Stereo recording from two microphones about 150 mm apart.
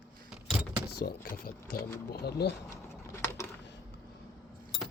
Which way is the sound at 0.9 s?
80° left.